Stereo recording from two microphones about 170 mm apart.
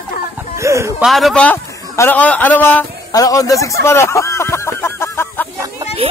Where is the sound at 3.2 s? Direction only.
20° left (ahead or behind).